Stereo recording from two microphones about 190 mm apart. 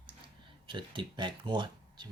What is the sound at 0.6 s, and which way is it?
Speech, 25° right (ahead or behind).